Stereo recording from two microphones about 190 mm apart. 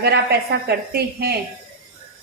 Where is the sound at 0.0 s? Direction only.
60° right (ahead or behind).